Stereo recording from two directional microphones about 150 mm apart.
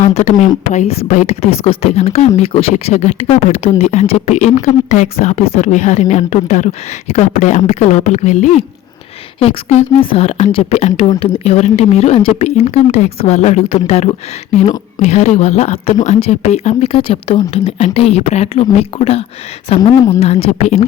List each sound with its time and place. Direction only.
0.0 s a woman's voice: 50° left (ahead or behind)